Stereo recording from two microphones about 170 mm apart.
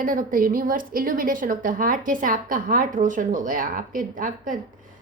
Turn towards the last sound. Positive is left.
turn(degrees=-50)  # may be behind; listen again after turning